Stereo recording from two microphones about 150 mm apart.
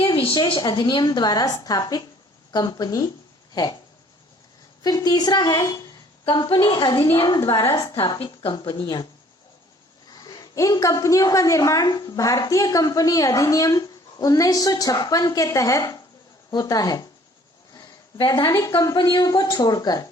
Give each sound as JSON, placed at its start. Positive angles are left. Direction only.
{"t": 0.0, "sound": "a woman's voice", "side_deg": 35}
{"t": 4.8, "sound": "a woman's voice", "side_deg": 25}
{"t": 7.3, "sound": "a woman's voice", "side_deg": 20}
{"t": 8.2, "sound": "a woman's voice", "side_deg": 40}
{"t": 8.5, "sound": "a woman's voice", "side_deg": 30}
{"t": 10.1, "sound": "a woman's voice", "side_deg": 25}
{"t": 17.7, "sound": "a sound", "side_deg": 30}
{"t": 18.7, "sound": "a woman's voice", "side_deg": 25}